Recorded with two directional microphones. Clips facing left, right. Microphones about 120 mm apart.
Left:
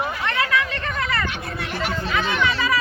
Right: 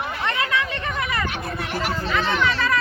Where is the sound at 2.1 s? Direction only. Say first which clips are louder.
Even; 5° left (ahead or behind).